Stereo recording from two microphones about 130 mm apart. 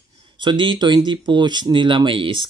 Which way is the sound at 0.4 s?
35° right (ahead or behind).